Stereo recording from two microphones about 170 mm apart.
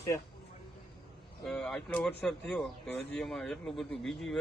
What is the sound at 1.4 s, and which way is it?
Speech, 5° left (ahead or behind).